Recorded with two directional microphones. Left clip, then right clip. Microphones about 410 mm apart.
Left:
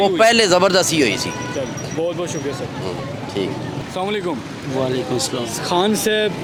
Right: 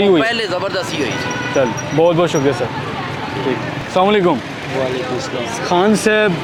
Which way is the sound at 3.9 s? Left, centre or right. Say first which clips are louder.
Right 10 dB; centre.